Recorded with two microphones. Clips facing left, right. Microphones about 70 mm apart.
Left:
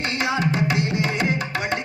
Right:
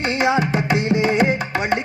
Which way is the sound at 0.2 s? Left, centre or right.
Right.